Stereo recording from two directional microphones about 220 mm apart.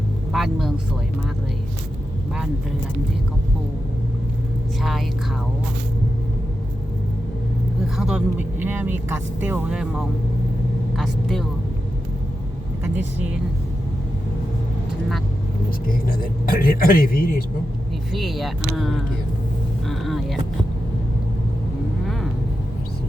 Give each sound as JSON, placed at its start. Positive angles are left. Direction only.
{"t": 0.3, "sound": "speech", "side_deg": 0}
{"t": 4.8, "sound": "speech", "side_deg": 0}
{"t": 7.9, "sound": "speech", "side_deg": -5}
{"t": 16.0, "sound": "speech", "side_deg": 40}
{"t": 18.1, "sound": "speech", "side_deg": 0}